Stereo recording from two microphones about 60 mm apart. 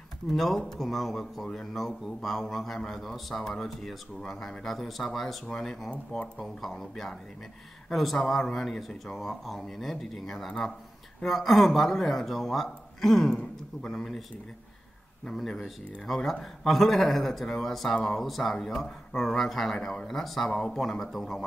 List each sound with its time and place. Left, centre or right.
0.3 s speech: centre
5.9 s speech: left
6.4 s speech: centre
15.2 s speech: centre